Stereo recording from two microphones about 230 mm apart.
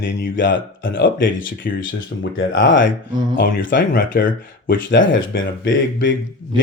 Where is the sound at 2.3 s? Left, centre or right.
Left.